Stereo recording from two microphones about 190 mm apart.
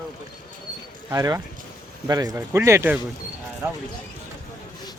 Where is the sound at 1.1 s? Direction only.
20° right (ahead or behind).